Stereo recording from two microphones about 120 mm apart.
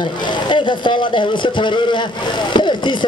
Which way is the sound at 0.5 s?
40° left (ahead or behind).